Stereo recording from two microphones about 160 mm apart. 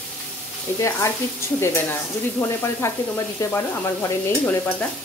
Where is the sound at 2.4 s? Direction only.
15° left (ahead or behind).